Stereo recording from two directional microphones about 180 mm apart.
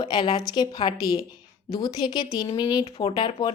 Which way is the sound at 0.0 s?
25° left (ahead or behind).